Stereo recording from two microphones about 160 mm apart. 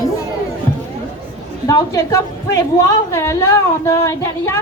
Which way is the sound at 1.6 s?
20° left (ahead or behind).